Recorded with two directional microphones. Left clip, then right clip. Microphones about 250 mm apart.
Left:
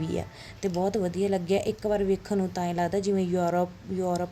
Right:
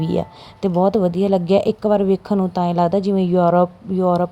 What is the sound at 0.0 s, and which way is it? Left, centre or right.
Speech, right.